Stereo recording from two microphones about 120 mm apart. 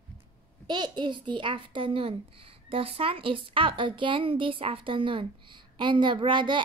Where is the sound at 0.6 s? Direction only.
35° right (ahead or behind).